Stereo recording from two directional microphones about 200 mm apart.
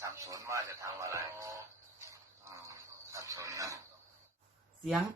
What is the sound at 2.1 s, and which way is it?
Mechanisms, 15° right (ahead or behind).